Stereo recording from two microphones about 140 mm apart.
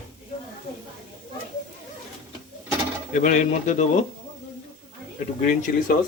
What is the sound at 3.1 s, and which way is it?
Speech, 65° left (ahead or behind).